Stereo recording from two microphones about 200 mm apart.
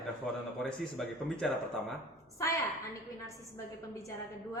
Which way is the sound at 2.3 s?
15° left (ahead or behind).